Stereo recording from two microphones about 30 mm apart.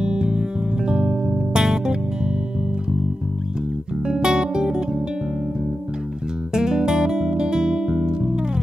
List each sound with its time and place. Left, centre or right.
0.0 s music: right
4.1 s music: right
6.5 s music: right